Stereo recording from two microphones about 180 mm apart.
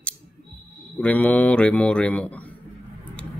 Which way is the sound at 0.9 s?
10° left (ahead or behind).